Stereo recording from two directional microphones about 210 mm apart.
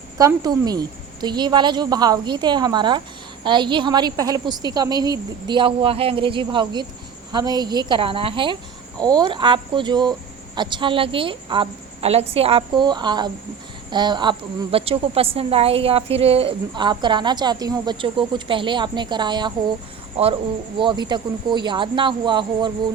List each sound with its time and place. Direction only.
0.2 s a woman's voice: 15° right (ahead or behind)
20.7 s a woman's voice: 20° right (ahead or behind)